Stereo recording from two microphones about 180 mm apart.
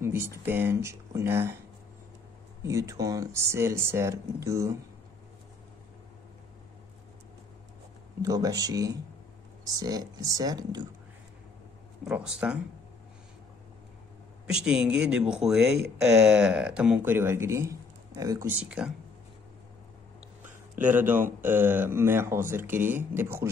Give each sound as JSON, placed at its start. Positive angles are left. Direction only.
{"t": 0.0, "sound": "speech", "side_deg": -15}
{"t": 2.6, "sound": "speech", "side_deg": -15}
{"t": 8.2, "sound": "speech", "side_deg": -20}
{"t": 12.0, "sound": "speech", "side_deg": -5}
{"t": 14.5, "sound": "speech", "side_deg": -5}
{"t": 18.7, "sound": "speech", "side_deg": -5}
{"t": 20.4, "sound": "a sound", "side_deg": -10}
{"t": 21.4, "sound": "speech", "side_deg": -10}